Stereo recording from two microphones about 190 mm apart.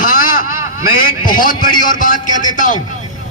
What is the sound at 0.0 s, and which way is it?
Vehicle, 50° left (ahead or behind).